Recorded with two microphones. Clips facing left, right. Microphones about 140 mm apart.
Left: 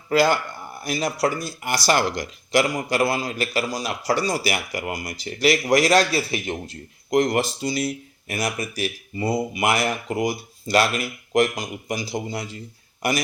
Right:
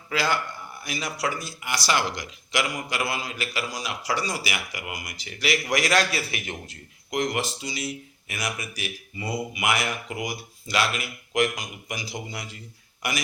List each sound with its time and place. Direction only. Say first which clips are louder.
0.1 s speech: left 7 dB; 50° left (ahead or behind); by 7.2 s 30° left (ahead or behind)
7.2 s speech: left 6 dB; 45° left (ahead or behind)
8.4 s speech: left 7 dB; 35° left (ahead or behind)